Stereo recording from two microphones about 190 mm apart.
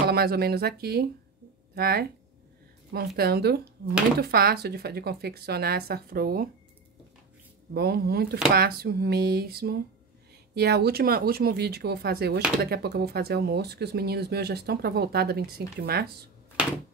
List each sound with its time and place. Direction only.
0.1 s speech: 55° right (ahead or behind)
3.2 s speech: 55° right (ahead or behind)
7.7 s speech: 55° right (ahead or behind)